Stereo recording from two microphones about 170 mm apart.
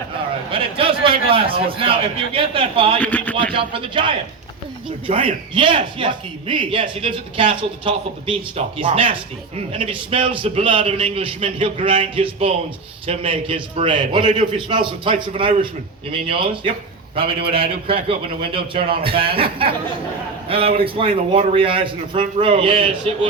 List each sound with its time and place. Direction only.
0.5 s speech: 30° right (ahead or behind)
3.0 s a sound: 10° left (ahead or behind)
3.5 s a man's voice: 30° right (ahead or behind)